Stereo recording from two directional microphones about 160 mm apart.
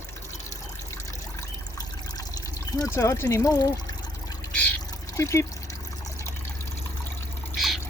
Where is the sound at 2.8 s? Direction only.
20° left (ahead or behind).